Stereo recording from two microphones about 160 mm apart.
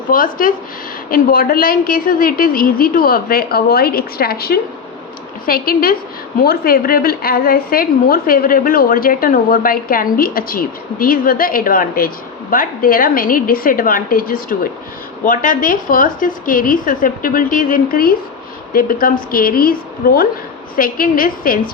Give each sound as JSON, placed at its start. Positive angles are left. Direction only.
{"t": 0.1, "sound": "a woman's voice", "side_deg": 60}